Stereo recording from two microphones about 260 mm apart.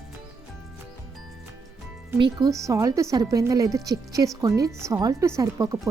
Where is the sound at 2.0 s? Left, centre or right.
Centre.